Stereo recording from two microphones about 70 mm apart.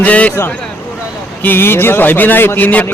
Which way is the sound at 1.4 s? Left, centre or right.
Left.